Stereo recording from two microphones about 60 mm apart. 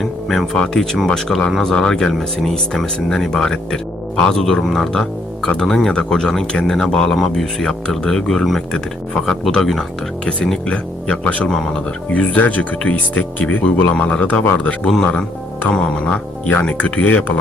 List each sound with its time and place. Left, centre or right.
0.0 s speech: centre; by 17.3 s left